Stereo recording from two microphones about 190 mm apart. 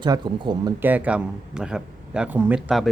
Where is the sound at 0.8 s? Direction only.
10° right (ahead or behind).